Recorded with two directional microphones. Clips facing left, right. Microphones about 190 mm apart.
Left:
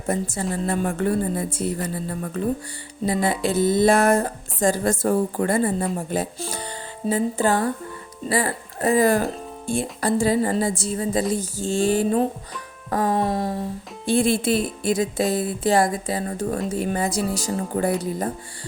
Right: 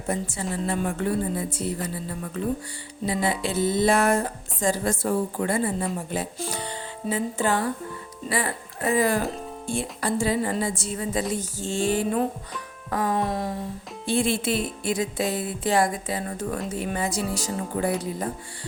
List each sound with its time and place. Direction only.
0.1 s speech: 45° left (ahead or behind)